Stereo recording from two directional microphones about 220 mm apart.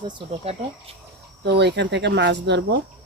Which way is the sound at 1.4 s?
50° right (ahead or behind).